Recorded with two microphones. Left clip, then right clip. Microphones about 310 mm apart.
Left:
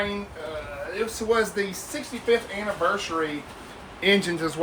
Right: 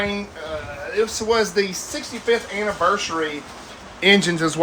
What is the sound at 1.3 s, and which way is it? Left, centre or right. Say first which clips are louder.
Speech: right 3 dB; right.